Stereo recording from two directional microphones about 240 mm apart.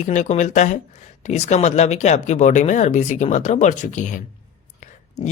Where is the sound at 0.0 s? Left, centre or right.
Left.